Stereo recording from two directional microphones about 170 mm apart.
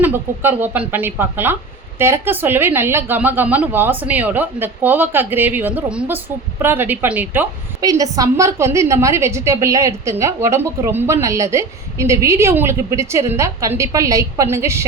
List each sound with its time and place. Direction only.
0.0 s a woman's voice: 10° right (ahead or behind)